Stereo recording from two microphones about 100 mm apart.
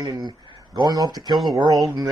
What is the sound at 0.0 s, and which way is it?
Speech, 40° right (ahead or behind).